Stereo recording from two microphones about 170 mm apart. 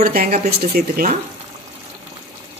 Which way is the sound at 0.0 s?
60° right (ahead or behind).